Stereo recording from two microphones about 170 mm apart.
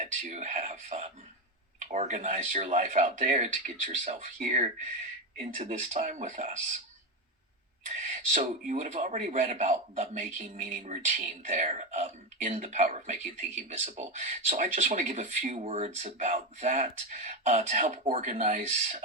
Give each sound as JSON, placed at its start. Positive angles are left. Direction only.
{"t": 0.0, "sound": "speech", "side_deg": -50}
{"t": 7.9, "sound": "speech", "side_deg": -45}